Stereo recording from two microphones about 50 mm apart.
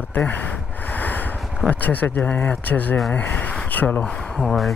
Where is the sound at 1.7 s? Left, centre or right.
Left.